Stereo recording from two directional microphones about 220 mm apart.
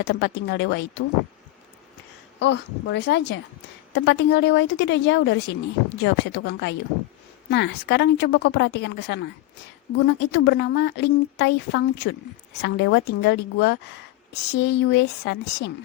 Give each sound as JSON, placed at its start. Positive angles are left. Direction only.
{"t": 0.0, "sound": "speech", "side_deg": 50}
{"t": 2.4, "sound": "speech", "side_deg": 55}